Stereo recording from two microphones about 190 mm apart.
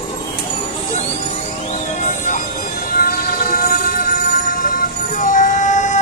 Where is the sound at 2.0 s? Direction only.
40° left (ahead or behind).